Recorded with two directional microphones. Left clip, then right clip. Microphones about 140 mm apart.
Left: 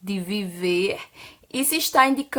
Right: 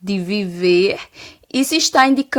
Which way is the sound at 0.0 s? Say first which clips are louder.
Right 7 dB; 30° right (ahead or behind).